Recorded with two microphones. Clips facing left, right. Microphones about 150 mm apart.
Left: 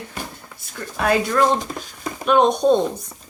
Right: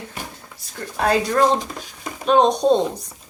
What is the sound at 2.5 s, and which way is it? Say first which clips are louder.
Speech: even; 35° right (ahead or behind).